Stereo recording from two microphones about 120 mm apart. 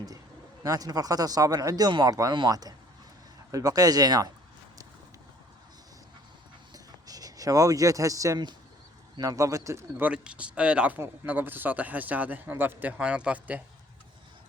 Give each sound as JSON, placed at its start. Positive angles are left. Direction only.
{"t": 0.6, "sound": "speech", "side_deg": -30}
{"t": 6.7, "sound": "a sound", "side_deg": -30}
{"t": 9.1, "sound": "speech", "side_deg": -30}
{"t": 10.0, "sound": "speech", "side_deg": -10}